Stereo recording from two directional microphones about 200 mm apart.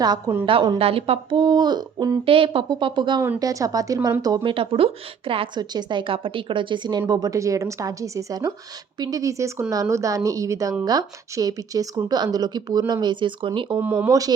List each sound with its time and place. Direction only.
0.0 s speech: 15° right (ahead or behind)
13.7 s speech: 10° right (ahead or behind)